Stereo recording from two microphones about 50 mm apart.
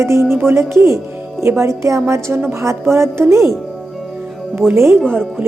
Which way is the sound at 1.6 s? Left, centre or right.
Right.